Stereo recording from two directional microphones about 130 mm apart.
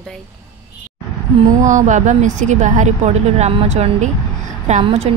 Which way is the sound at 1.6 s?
70° right (ahead or behind).